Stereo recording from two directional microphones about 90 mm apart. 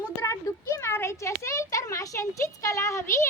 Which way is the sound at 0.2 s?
30° left (ahead or behind).